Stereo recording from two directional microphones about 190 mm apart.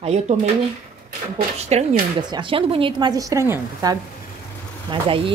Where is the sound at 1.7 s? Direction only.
35° right (ahead or behind).